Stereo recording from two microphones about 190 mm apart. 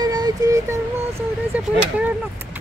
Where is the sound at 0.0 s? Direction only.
20° right (ahead or behind).